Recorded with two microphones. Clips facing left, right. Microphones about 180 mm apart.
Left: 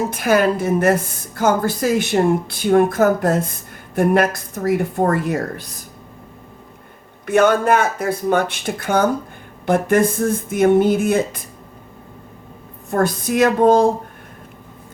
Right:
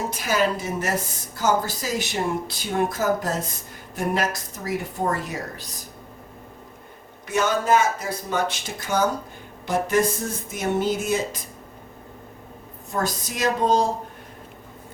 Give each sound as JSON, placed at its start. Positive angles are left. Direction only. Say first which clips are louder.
{"t": 0.1, "sound": "speech", "louder": "left 6 dB", "side_deg": 55}
{"t": 7.3, "sound": "speech", "louder": "left 7 dB", "side_deg": 55}
{"t": 12.9, "sound": "speech", "louder": "left 9 dB", "side_deg": 55}